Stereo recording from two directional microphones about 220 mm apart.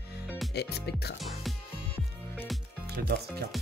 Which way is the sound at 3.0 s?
45° right (ahead or behind).